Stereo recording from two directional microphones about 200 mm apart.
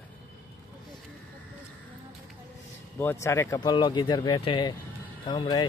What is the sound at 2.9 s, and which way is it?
Speech, 15° left (ahead or behind).